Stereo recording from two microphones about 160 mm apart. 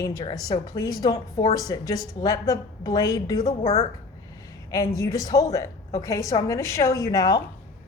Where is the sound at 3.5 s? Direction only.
40° left (ahead or behind).